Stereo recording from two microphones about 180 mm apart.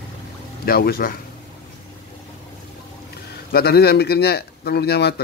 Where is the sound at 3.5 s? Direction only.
60° left (ahead or behind).